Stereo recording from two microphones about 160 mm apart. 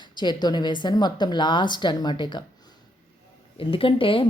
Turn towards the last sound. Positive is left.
turn(degrees=35)  # may be behind; listen again after turning